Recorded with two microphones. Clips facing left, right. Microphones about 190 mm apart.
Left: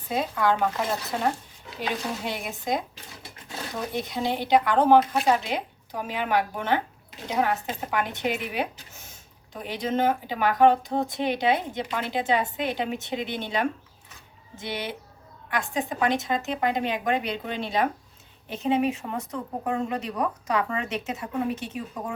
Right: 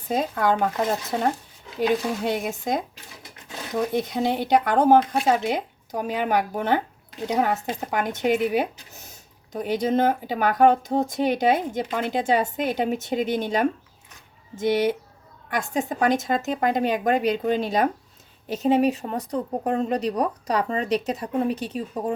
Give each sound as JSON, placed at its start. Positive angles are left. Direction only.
{"t": 0.1, "sound": "speech", "side_deg": -45}
{"t": 3.9, "sound": "speech", "side_deg": -45}